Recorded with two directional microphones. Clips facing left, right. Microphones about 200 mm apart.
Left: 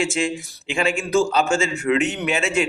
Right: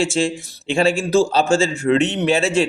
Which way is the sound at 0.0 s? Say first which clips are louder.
Right 3 dB; 30° right (ahead or behind).